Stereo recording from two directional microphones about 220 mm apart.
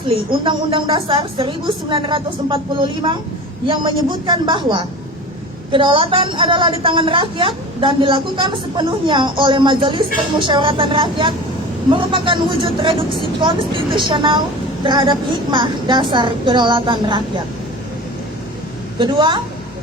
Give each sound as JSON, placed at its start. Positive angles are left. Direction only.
{"t": 0.4, "sound": "a woman's voice", "side_deg": -20}
{"t": 18.9, "sound": "a woman's voice", "side_deg": -20}